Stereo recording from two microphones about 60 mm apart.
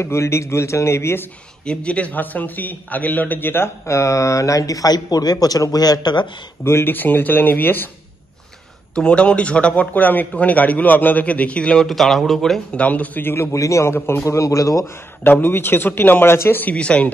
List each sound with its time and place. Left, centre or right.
0.0 s a man's voice: left
1.7 s a man's voice: centre; by 5.9 s left
6.6 s speech: left
8.9 s a man's voice: centre
11.8 s speech: centre
12.7 s a man's voice: left
13.5 s a man's voice: left
13.9 s a man's voice: left
15.2 s speech: left
16.6 s a man's voice: centre